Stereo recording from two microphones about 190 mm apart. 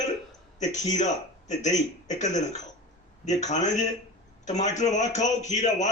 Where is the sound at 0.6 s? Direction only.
35° left (ahead or behind).